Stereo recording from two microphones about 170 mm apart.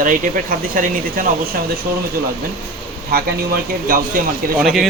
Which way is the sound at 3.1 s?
65° right (ahead or behind).